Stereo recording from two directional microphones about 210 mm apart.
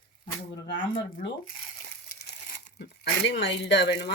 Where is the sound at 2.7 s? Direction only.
55° left (ahead or behind).